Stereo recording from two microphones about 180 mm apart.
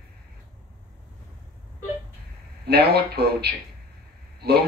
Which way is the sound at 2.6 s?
60° right (ahead or behind).